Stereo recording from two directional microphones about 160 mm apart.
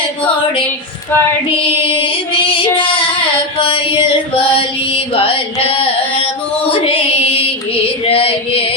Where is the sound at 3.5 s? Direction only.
35° left (ahead or behind).